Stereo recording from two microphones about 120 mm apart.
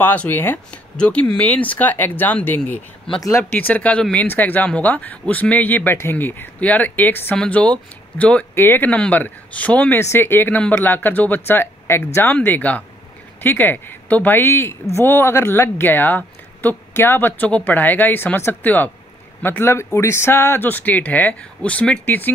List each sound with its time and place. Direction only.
0.0 s speech: 15° left (ahead or behind)
3.2 s speech: 25° left (ahead or behind)
3.5 s speech: 15° left (ahead or behind)